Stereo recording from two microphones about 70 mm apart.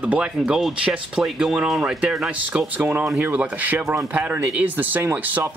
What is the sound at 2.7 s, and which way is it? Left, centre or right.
Speech, right.